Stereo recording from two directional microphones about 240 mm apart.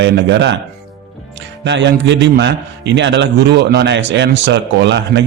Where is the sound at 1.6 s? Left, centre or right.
Right.